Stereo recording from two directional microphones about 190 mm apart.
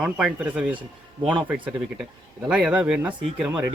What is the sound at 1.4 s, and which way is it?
Speech, 10° right (ahead or behind).